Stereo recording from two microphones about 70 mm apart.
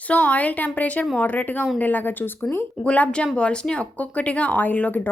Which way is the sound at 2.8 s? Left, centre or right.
Centre.